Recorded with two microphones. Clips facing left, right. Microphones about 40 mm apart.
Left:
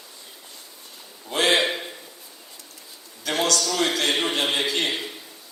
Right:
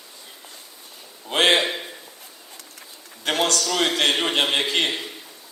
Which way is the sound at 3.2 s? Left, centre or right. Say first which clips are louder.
Right 1 dB; right.